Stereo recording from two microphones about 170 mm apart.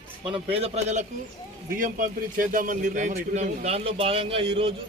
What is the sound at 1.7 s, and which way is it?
A man's voice, 50° right (ahead or behind).